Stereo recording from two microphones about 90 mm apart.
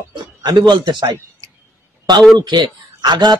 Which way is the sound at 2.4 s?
55° right (ahead or behind).